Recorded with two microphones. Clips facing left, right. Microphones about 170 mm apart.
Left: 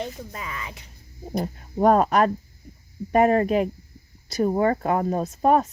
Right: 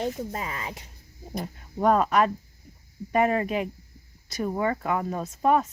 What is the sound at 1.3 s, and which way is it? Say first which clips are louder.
Speech: left 6 dB; 35° left (ahead or behind).